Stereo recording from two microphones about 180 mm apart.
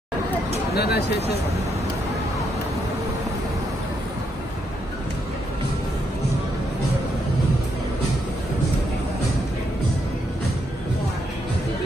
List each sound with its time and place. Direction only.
0.7 s speech: 65° left (ahead or behind)